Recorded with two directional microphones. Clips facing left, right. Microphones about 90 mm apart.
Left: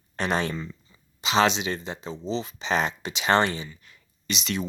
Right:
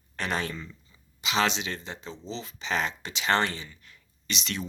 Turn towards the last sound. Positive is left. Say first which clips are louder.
# left 4 dB
turn(degrees=15)  # may be behind; listen again after turning